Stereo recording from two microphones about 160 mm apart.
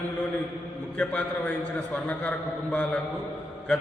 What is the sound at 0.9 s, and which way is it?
Speech, 5° left (ahead or behind).